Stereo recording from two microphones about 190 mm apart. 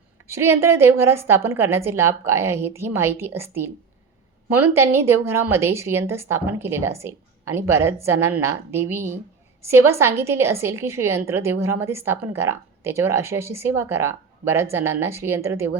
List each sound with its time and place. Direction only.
0.3 s a woman's voice: 15° right (ahead or behind)
4.7 s a woman's voice: 15° right (ahead or behind)